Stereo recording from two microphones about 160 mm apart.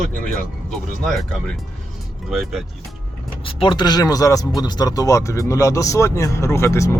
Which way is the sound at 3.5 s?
30° left (ahead or behind).